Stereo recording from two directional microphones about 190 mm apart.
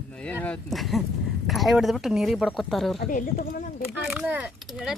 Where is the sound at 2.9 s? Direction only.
40° left (ahead or behind).